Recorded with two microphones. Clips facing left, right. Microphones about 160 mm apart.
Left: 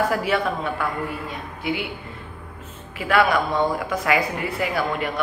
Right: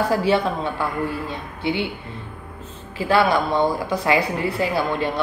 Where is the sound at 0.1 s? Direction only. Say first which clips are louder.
Right 3 dB; 30° right (ahead or behind).